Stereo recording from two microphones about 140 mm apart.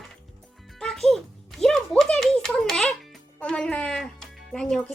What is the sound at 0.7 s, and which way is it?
Music, 5° left (ahead or behind).